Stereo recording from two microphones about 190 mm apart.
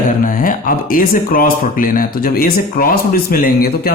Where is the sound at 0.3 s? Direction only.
45° left (ahead or behind).